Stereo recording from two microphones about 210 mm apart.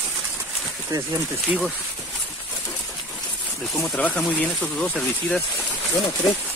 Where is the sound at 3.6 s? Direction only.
Centre (ahead or behind).